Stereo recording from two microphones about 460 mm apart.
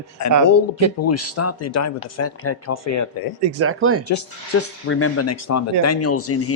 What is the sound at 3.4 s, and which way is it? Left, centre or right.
Speech, right.